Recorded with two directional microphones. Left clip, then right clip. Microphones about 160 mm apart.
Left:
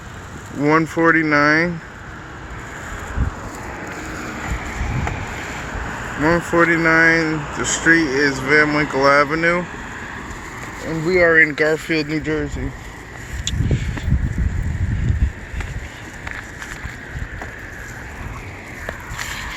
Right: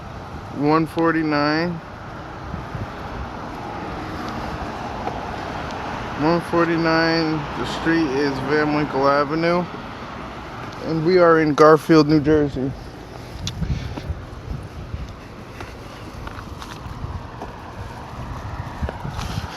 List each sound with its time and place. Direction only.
0.7 s speech: 15° left (ahead or behind)
5.1 s vehicle: centre (ahead or behind)
6.5 s speech: 15° left (ahead or behind)
9.3 s speech: centre (ahead or behind)
10.8 s speech: 10° right (ahead or behind)
11.4 s speech: 45° right (ahead or behind)
12.2 s speech: 35° right (ahead or behind)